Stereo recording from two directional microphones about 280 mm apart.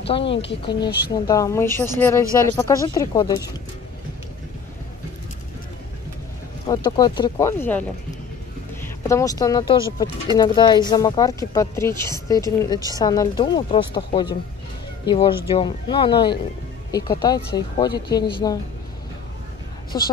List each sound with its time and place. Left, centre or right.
0.0 s speech: centre
0.3 s speech: left
1.2 s speech: centre
6.7 s a woman's voice: centre
19.9 s speech: centre